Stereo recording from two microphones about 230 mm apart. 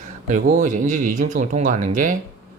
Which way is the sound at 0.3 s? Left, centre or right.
Right.